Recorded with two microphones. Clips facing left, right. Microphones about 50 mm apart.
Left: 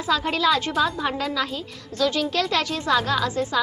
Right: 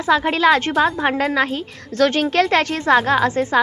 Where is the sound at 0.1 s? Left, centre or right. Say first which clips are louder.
Right 6 dB; right.